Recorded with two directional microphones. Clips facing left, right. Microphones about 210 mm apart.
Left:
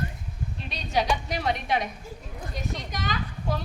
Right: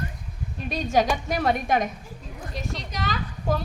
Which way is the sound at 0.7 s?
45° right (ahead or behind).